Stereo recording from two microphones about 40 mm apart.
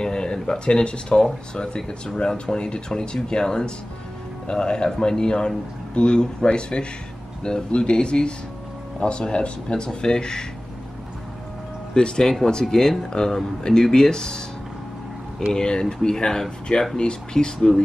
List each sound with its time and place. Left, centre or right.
0.0 s speech: centre
11.9 s speech: centre
15.5 s speech: centre